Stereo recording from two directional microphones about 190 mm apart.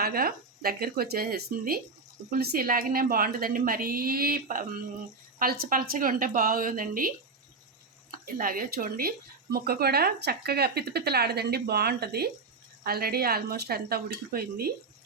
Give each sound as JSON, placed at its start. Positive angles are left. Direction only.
{"t": 0.0, "sound": "a woman's voice", "side_deg": -50}
{"t": 8.4, "sound": "a woman's voice", "side_deg": -50}